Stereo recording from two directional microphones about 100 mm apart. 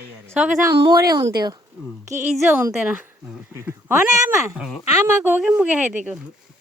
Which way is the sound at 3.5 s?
25° right (ahead or behind).